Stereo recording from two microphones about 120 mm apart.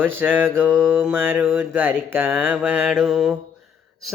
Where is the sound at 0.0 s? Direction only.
15° right (ahead or behind).